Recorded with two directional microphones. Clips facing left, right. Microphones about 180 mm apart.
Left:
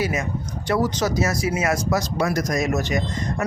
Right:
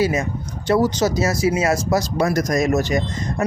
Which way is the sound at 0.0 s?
30° right (ahead or behind).